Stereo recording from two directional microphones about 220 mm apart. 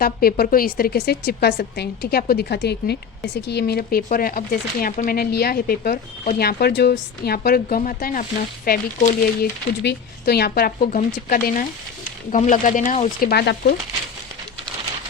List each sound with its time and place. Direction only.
0.0 s speech: 45° left (ahead or behind)